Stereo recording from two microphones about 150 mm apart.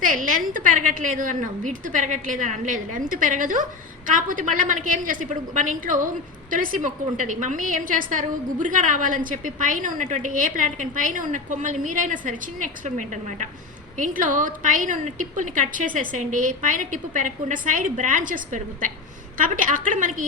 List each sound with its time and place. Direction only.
0.0 s a woman's voice: 60° right (ahead or behind)